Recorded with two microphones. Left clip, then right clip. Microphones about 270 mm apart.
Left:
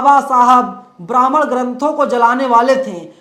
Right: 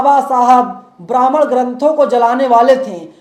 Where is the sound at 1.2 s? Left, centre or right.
Left.